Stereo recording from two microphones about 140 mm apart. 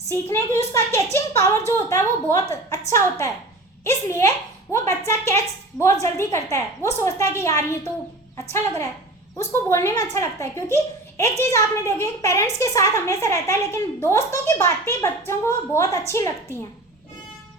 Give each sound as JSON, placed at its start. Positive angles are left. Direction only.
{"t": 0.1, "sound": "a child's voice", "side_deg": 20}